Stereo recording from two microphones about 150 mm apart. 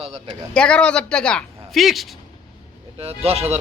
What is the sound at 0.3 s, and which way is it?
Speech, 5° left (ahead or behind).